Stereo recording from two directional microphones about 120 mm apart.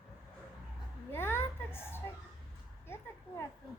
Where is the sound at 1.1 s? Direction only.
20° left (ahead or behind).